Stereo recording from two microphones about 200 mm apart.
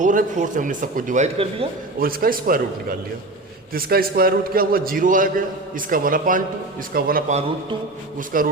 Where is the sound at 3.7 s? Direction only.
50° right (ahead or behind).